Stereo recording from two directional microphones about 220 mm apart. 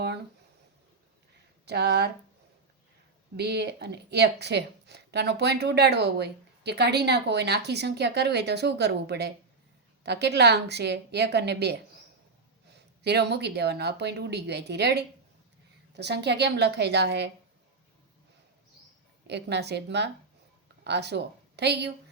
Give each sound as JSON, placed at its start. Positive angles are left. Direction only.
{"t": 1.6, "sound": "speech", "side_deg": -50}
{"t": 3.3, "sound": "speech", "side_deg": -50}
{"t": 13.0, "sound": "speech", "side_deg": -50}
{"t": 19.3, "sound": "speech", "side_deg": -50}